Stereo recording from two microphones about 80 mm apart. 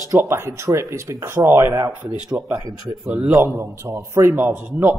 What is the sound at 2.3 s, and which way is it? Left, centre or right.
A man's voice, centre.